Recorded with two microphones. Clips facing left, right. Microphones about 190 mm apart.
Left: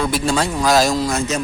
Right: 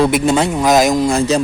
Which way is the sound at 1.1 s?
35° right (ahead or behind).